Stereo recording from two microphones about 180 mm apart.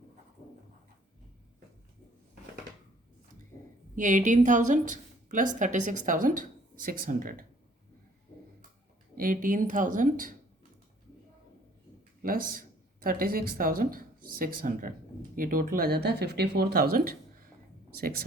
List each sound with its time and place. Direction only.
3.9 s a woman's voice: 45° right (ahead or behind)
9.1 s speech: 50° right (ahead or behind)
12.2 s speech: 55° right (ahead or behind)